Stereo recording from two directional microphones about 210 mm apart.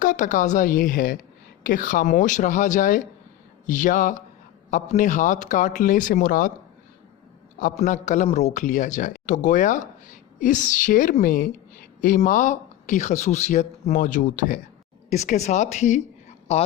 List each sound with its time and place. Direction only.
0.0 s a man's voice: 40° left (ahead or behind)
7.6 s a man's voice: 35° left (ahead or behind)